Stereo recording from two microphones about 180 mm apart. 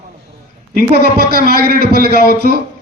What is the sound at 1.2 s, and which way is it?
A man's voice, 60° right (ahead or behind).